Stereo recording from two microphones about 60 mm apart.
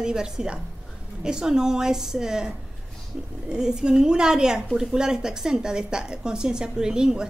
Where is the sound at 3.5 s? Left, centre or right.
Centre.